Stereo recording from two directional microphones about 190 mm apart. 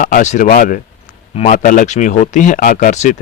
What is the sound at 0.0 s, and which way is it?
Speech, 45° left (ahead or behind).